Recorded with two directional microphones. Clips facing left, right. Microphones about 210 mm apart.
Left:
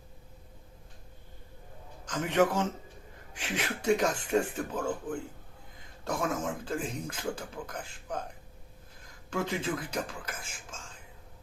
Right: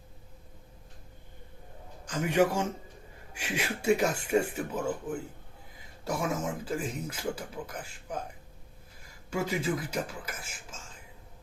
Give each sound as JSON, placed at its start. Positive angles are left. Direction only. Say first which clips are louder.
{"t": 2.0, "sound": "speech", "louder": "right 1 dB", "side_deg": -10}